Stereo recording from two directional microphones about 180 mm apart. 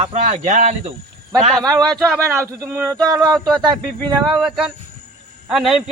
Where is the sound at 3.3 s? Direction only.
Centre (ahead or behind).